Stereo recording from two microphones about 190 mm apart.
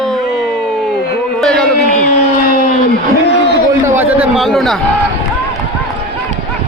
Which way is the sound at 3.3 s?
65° left (ahead or behind).